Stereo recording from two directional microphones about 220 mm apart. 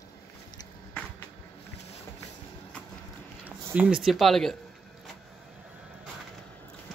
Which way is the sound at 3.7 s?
5° right (ahead or behind).